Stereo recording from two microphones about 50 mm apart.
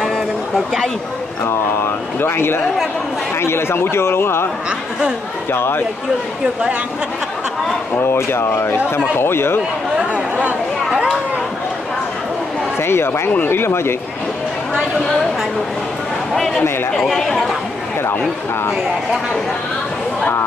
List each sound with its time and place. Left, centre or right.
0.0 s a sound: centre
1.4 s a man's voice: left
5.5 s speech: left
8.0 s speech: left
10.1 s chatter: right
12.7 s a man's voice: left
16.9 s speech: centre